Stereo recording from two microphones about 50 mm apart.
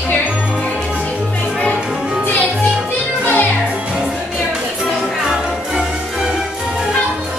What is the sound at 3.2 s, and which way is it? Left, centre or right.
Music, left.